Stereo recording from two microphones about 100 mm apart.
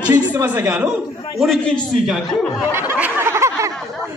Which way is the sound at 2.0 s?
Centre (ahead or behind).